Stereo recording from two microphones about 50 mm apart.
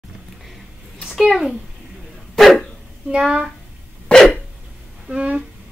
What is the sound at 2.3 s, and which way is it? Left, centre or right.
Dog, centre.